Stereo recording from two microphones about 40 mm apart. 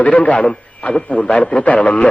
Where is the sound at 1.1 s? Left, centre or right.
Centre.